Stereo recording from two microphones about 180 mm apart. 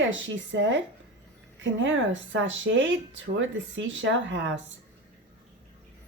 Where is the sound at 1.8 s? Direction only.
90° right.